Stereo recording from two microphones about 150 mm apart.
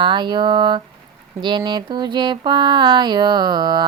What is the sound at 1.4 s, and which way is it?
Mantra, 30° right (ahead or behind).